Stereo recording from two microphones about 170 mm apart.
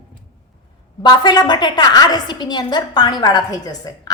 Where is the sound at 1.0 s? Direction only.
25° left (ahead or behind).